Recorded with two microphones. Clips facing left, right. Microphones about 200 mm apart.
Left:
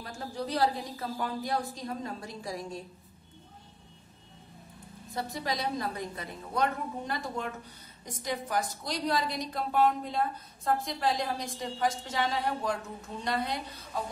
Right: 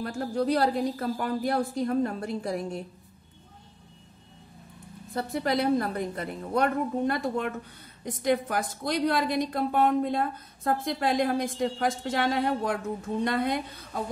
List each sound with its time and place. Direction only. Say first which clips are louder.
0.0 s a woman's voice: right 9 dB; 60° right (ahead or behind)
5.1 s a woman's voice: right 7 dB; 55° right (ahead or behind)